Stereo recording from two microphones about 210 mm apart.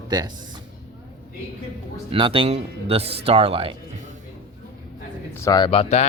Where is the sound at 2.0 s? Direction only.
25° right (ahead or behind).